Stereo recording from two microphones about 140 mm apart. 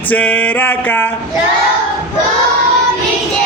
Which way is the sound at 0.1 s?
10° left (ahead or behind).